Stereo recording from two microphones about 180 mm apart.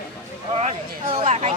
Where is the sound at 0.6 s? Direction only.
35° right (ahead or behind).